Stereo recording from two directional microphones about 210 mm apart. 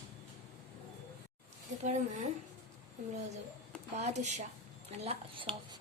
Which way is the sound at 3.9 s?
35° right (ahead or behind).